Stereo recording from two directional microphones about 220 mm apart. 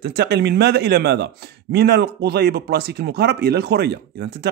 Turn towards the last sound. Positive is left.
turn(degrees=-50)  # may be behind; listen again after turning